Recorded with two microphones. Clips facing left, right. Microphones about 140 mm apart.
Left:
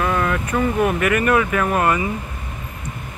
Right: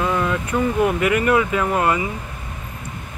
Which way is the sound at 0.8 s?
20° right (ahead or behind).